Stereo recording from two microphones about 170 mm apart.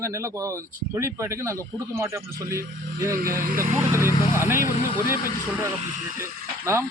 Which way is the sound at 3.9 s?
15° right (ahead or behind).